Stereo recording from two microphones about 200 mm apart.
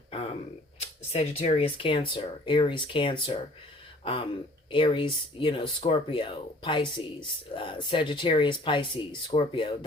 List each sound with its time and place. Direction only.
1.1 s speech: 30° left (ahead or behind)